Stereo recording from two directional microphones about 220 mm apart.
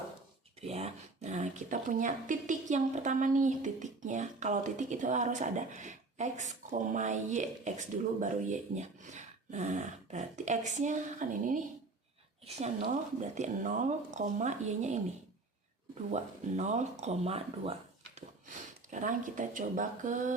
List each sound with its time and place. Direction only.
0.6 s speech: 30° right (ahead or behind)
16.1 s speech: 30° right (ahead or behind)